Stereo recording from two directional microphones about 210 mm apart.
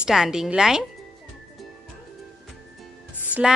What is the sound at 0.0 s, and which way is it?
Speech, 5° right (ahead or behind).